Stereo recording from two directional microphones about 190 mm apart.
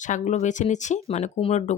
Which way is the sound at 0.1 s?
40° left (ahead or behind).